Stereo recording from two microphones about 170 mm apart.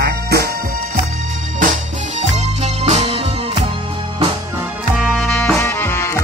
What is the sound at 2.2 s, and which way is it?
Music, 40° right (ahead or behind).